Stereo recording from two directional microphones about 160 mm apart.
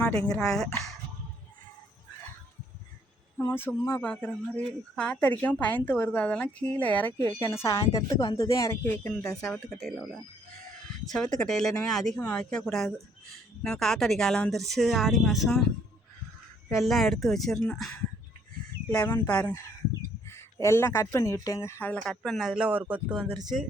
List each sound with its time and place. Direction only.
0.3 s speech: centre (ahead or behind)
3.3 s speech: 15° left (ahead or behind)
9.4 s speech: 5° left (ahead or behind)
16.6 s speech: centre (ahead or behind)
19.0 s speech: 10° left (ahead or behind)
22.0 s speech: 5° left (ahead or behind)